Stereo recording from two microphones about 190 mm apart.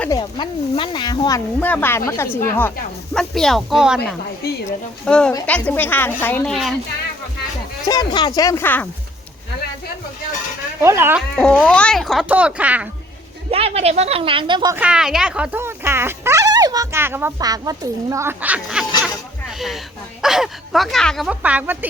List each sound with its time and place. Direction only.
0.2 s speech: 25° left (ahead or behind)
1.5 s speech: 10° left (ahead or behind)
5.0 s speech: 5° left (ahead or behind)
7.9 s speech: 20° left (ahead or behind)
10.8 s speech: 10° right (ahead or behind)
11.3 s speech: 5° left (ahead or behind)
13.5 s a woman's voice: 30° right (ahead or behind)
14.8 s speech: 5° right (ahead or behind)
19.0 s a sound: centre (ahead or behind)
20.2 s speech: centre (ahead or behind)